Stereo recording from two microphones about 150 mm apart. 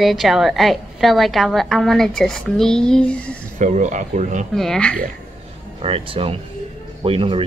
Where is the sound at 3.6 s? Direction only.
55° right (ahead or behind).